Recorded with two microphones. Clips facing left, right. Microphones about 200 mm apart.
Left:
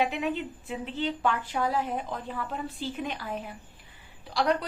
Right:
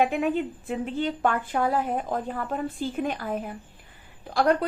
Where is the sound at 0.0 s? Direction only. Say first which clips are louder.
Right 5 dB; 50° right (ahead or behind).